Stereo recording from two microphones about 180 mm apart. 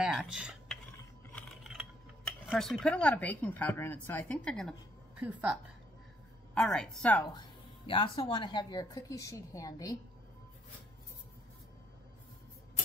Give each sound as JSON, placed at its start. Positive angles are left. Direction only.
{"t": 0.0, "sound": "cutlery", "side_deg": -5}
{"t": 1.6, "sound": "speech", "side_deg": 0}
{"t": 5.2, "sound": "speech", "side_deg": -10}
{"t": 6.5, "sound": "a woman's voice", "side_deg": 5}
{"t": 7.3, "sound": "speech", "side_deg": 30}